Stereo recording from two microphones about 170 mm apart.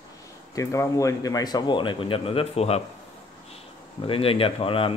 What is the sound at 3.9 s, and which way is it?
Speech, 35° left (ahead or behind).